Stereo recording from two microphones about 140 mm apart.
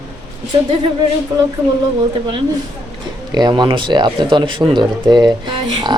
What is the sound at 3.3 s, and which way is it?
A woman's voice, 30° right (ahead or behind).